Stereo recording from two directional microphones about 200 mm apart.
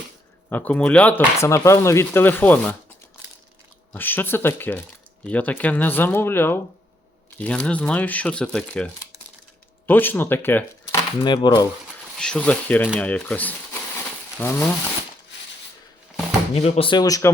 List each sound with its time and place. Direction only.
0.5 s speech: 10° left (ahead or behind)
3.9 s speech: 10° left (ahead or behind)
11.2 s speech: 20° left (ahead or behind)
12.1 s speech: 5° left (ahead or behind)
16.6 s speech: 30° left (ahead or behind)